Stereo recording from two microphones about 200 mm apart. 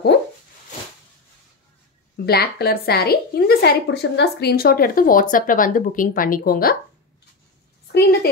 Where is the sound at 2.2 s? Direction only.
50° left (ahead or behind).